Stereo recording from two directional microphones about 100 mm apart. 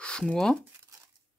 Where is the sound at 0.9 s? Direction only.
35° right (ahead or behind).